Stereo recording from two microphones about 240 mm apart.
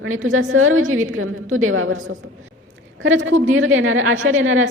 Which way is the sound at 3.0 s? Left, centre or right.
Right.